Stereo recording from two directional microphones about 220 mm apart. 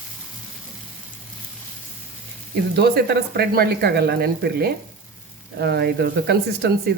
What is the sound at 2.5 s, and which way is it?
Speech, 50° right (ahead or behind).